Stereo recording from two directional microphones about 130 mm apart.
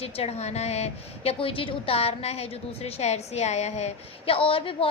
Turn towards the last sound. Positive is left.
turn(degrees=45)  # may be behind; listen again after turning